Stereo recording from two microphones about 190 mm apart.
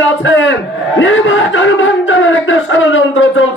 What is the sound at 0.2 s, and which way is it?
A man's voice, 75° left (ahead or behind).